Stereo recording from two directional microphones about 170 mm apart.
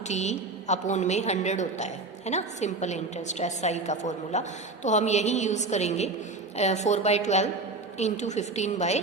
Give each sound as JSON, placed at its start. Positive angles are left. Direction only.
{"t": 0.1, "sound": "a woman's voice", "side_deg": 40}